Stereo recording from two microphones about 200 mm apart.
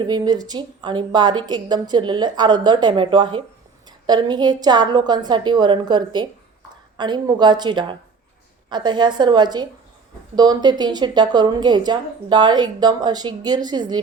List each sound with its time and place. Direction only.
0.0 s a woman's voice: 20° right (ahead or behind)